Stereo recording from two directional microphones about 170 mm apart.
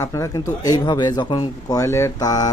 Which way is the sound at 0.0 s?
20° left (ahead or behind).